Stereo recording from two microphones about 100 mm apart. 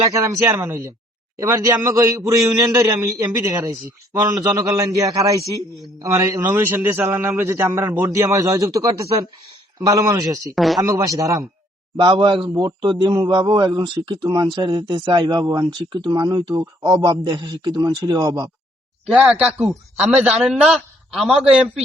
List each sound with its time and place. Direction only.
0.1 s a man's voice: 30° right (ahead or behind)
6.4 s a man's voice: 20° right (ahead or behind)
10.5 s speech: centre (ahead or behind)
10.8 s a man's voice: 30° right (ahead or behind)
11.9 s a man's voice: 50° right (ahead or behind)
19.0 s a man's voice: 10° right (ahead or behind)